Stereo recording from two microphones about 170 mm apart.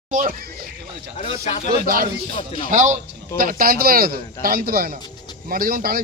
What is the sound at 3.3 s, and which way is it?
A man's voice, 55° right (ahead or behind).